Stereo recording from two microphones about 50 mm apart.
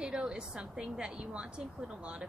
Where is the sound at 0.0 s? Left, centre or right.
Centre.